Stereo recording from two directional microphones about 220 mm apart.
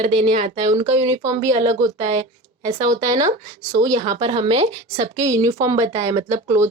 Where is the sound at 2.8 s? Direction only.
15° right (ahead or behind).